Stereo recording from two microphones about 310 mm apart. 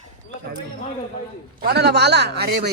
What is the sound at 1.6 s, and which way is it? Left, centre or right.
Speech, right.